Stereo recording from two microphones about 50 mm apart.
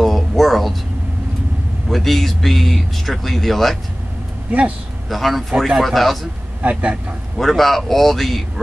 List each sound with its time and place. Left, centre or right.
0.0 s a sound: centre
1.9 s speech: centre
4.5 s speech: right
5.1 s speech: centre
6.6 s speech: right
7.3 s speech: centre